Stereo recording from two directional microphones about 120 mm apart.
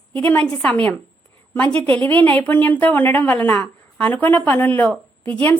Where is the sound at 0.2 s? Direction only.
15° left (ahead or behind).